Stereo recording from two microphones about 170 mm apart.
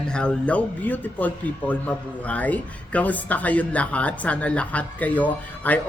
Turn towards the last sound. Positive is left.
turn(degrees=10)  # may be behind; listen again after turning